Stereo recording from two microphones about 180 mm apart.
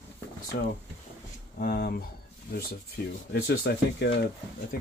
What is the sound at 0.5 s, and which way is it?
Speech, 45° left (ahead or behind).